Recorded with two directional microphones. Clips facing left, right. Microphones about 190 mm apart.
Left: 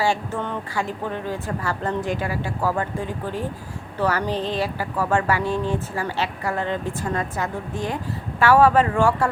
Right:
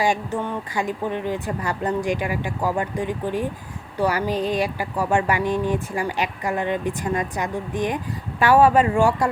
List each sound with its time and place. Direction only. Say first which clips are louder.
0.0 s speech: right 1 dB; 15° right (ahead or behind)